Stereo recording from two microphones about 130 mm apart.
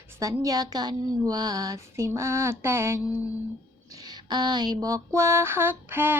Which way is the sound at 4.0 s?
35° right (ahead or behind).